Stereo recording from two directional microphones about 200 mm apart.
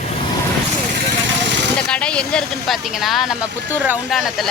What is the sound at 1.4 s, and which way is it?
Vehicle, 60° right (ahead or behind).